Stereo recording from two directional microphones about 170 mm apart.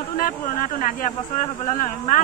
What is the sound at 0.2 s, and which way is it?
Speech, 50° left (ahead or behind).